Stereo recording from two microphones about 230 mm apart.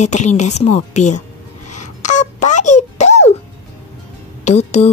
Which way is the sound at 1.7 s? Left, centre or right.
Left.